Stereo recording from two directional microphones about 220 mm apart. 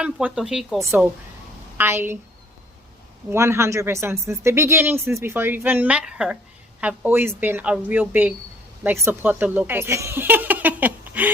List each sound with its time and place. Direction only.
0.0 s speech: 5° right (ahead or behind)
3.2 s speech: 10° right (ahead or behind)